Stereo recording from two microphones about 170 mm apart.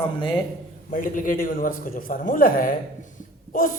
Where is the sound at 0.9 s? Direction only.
50° left (ahead or behind).